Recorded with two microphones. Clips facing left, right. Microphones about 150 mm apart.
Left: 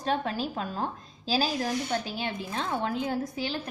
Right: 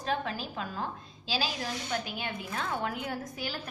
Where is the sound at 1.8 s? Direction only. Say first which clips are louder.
Left 4 dB; 30° left (ahead or behind).